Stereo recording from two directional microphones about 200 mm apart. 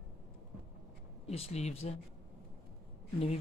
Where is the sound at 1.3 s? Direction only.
30° left (ahead or behind).